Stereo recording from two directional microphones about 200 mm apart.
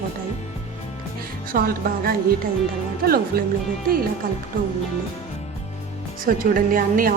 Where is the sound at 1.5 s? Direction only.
50° right (ahead or behind).